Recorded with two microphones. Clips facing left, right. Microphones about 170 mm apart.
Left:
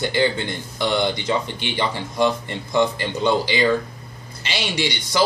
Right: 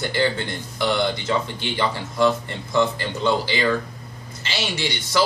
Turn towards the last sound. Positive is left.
turn(degrees=15)  # may be behind; listen again after turning